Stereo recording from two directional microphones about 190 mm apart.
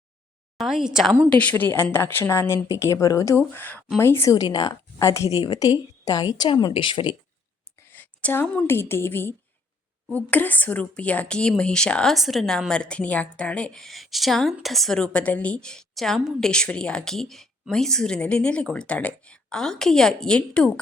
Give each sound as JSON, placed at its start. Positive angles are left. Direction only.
{"t": 0.5, "sound": "speech", "side_deg": 0}
{"t": 1.4, "sound": "a woman's voice", "side_deg": 10}
{"t": 7.9, "sound": "speech", "side_deg": 10}